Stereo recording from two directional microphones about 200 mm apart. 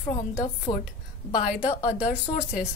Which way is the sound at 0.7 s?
20° left (ahead or behind).